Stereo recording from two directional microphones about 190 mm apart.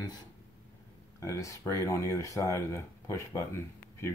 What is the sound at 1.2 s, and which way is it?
Speech, 15° left (ahead or behind).